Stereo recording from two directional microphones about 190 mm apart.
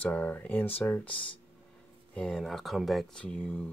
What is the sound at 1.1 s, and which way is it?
Speech, 30° left (ahead or behind).